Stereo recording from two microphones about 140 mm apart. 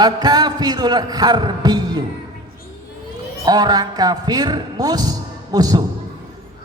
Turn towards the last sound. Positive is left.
turn(degrees=-30)  # may be behind; listen again after turning